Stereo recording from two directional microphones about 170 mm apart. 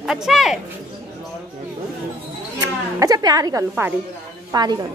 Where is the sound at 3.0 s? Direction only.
20° right (ahead or behind).